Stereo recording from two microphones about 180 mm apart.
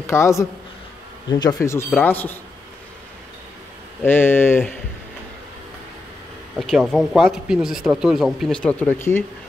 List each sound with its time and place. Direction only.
0.0 s a man's voice: 15° left (ahead or behind)
4.0 s speech: 10° left (ahead or behind)
6.5 s speech: centre (ahead or behind)